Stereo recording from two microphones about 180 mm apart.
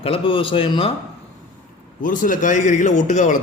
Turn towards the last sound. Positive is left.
turn(degrees=45)  # may be behind; listen again after turning